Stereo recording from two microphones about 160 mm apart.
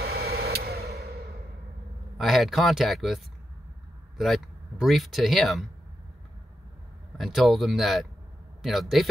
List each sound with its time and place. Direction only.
0.0 s a sound: 75° right (ahead or behind)
2.1 s speech: centre (ahead or behind)
4.2 s speech: centre (ahead or behind)
7.2 s speech: centre (ahead or behind)